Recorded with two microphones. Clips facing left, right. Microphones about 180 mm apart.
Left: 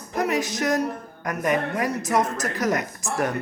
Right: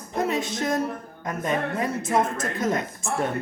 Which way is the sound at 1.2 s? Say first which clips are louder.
Left 2 dB; 80° left.